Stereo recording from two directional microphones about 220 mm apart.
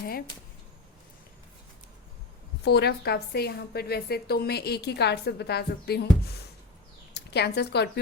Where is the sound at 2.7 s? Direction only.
45° left (ahead or behind).